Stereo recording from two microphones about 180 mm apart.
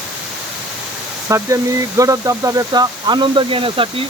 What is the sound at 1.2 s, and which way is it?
Speech, 15° right (ahead or behind).